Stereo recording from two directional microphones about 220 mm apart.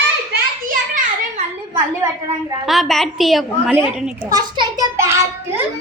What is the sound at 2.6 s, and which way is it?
A woman's voice, centre (ahead or behind).